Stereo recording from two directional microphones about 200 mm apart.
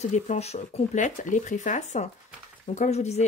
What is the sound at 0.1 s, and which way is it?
Speech, 35° left (ahead or behind).